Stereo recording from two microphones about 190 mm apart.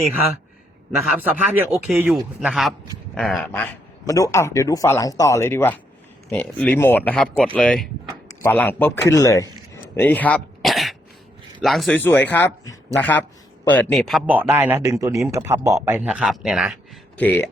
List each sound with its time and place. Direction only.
0.9 s a man's voice: 5° right (ahead or behind)
3.5 s speech: 15° left (ahead or behind)
14.3 s a man's voice: 10° right (ahead or behind)
17.2 s speech: 10° left (ahead or behind)